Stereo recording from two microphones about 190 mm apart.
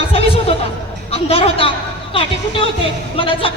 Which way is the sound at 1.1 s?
30° left (ahead or behind).